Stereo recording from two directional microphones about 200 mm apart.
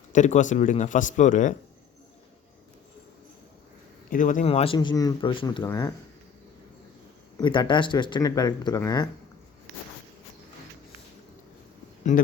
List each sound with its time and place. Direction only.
0.1 s a man's voice: 40° left (ahead or behind)
4.1 s speech: 40° left (ahead or behind); by 5.9 s 15° left (ahead or behind)
7.3 s speech: 20° left (ahead or behind)
12.1 s a man's voice: 40° left (ahead or behind)